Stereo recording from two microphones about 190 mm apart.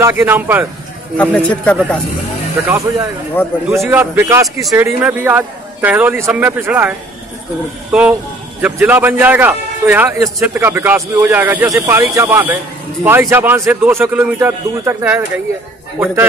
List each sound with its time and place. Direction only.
0.0 s a man's voice: 10° right (ahead or behind)
1.1 s speech: 5° left (ahead or behind)
2.7 s a man's voice: 15° right (ahead or behind)
3.4 s a man's voice: 10° left (ahead or behind)
3.8 s a man's voice: 10° right (ahead or behind)
7.9 s a man's voice: 10° right (ahead or behind)